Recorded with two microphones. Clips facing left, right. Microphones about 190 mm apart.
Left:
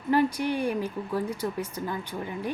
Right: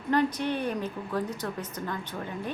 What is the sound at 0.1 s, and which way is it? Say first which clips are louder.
A woman's voice: left 2 dB; 10° left (ahead or behind).